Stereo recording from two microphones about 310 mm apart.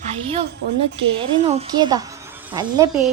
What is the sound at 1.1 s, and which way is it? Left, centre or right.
A woman's voice, centre.